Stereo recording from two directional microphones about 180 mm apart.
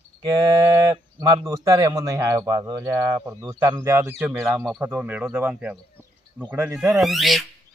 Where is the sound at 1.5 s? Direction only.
15° right (ahead or behind).